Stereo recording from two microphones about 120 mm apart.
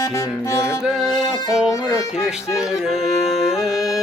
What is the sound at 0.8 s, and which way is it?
Music, centre (ahead or behind).